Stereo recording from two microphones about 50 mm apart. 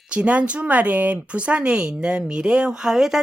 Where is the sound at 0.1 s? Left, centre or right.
Right.